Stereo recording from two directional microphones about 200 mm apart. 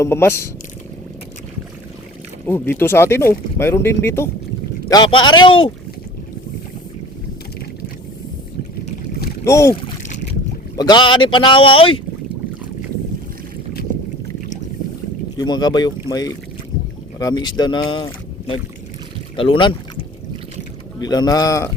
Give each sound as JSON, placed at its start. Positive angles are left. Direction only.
{"t": 0.0, "sound": "speech", "side_deg": 10}
{"t": 2.5, "sound": "speech", "side_deg": 10}
{"t": 9.5, "sound": "speech", "side_deg": 15}
{"t": 10.8, "sound": "speech", "side_deg": 20}
{"t": 15.4, "sound": "speech", "side_deg": 20}
{"t": 21.0, "sound": "speech", "side_deg": 20}